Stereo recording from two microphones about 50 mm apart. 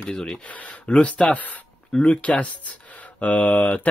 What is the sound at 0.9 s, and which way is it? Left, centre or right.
Speech, left.